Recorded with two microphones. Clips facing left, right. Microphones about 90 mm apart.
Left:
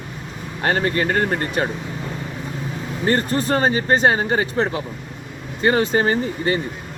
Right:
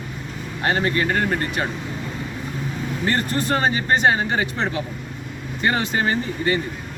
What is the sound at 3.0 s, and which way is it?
Speech, 35° left (ahead or behind).